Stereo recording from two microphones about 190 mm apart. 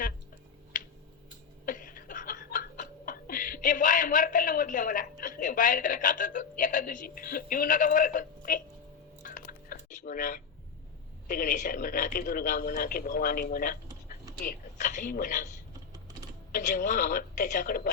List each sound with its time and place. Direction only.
0.7 s a sound: 45° left (ahead or behind)
1.6 s chuckle: 45° left (ahead or behind)
5.4 s a woman's voice: 45° left (ahead or behind)
9.2 s drip: 45° left (ahead or behind)
11.3 s a woman's voice: 45° left (ahead or behind)